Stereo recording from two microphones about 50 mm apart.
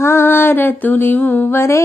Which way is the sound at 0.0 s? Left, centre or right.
Left.